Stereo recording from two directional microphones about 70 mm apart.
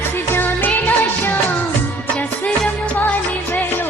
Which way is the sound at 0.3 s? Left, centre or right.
Left.